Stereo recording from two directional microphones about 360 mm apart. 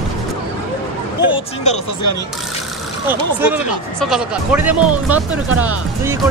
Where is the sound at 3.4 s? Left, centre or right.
Centre.